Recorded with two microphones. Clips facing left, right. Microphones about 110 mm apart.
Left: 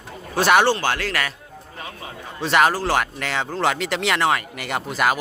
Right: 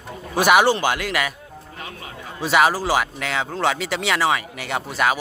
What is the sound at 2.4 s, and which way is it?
Speech, 5° right (ahead or behind).